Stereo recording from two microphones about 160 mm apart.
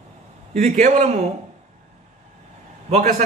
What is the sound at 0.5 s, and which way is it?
Speech, 45° right (ahead or behind).